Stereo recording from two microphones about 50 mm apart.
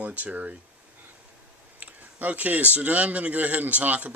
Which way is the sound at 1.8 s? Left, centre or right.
Right.